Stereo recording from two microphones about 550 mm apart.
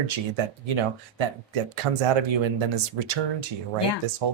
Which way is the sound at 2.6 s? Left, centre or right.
Right.